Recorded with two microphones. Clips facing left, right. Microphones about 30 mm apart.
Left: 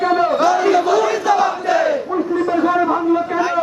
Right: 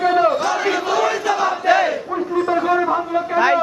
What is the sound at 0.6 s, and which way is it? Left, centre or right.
Crowd, centre.